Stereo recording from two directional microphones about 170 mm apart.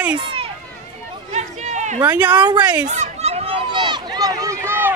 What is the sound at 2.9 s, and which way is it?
Run, 40° right (ahead or behind).